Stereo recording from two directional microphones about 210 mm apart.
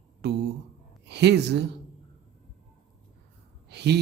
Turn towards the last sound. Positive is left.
turn(degrees=-50)  # may be behind; listen again after turning